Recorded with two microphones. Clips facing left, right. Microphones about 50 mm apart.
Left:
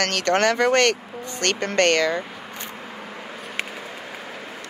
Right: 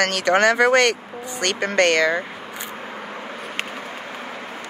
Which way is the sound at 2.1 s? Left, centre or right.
Centre.